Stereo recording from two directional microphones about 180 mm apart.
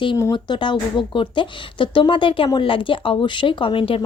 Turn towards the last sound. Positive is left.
turn(degrees=30)  # may be behind; listen again after turning